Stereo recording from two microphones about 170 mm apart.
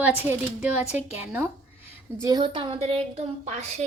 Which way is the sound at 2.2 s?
25° right (ahead or behind).